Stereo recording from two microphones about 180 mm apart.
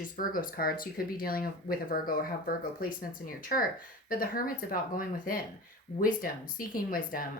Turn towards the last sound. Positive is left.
turn(degrees=50)  # may be behind; listen again after turning